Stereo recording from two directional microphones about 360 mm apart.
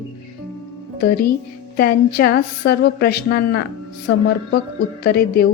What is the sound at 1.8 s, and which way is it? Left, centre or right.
A woman's voice, left.